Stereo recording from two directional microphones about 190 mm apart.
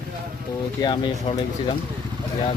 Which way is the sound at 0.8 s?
25° left (ahead or behind).